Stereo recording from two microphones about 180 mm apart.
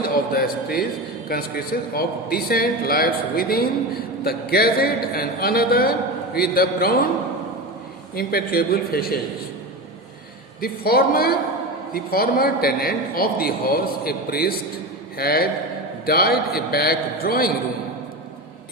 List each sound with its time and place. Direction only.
0.0 s a man's voice: 55° left (ahead or behind)
8.1 s a man's voice: 60° left (ahead or behind)
10.6 s a man's voice: 55° left (ahead or behind)